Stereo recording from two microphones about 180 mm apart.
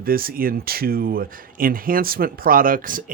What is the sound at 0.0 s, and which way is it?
Speech, 55° right (ahead or behind).